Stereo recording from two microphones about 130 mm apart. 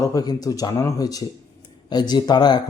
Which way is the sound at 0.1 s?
30° left (ahead or behind).